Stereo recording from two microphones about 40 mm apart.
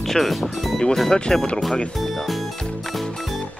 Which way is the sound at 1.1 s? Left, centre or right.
Centre.